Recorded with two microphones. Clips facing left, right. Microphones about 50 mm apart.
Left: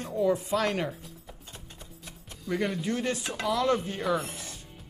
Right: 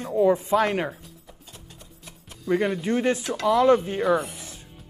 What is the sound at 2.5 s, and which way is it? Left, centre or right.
Speech, centre.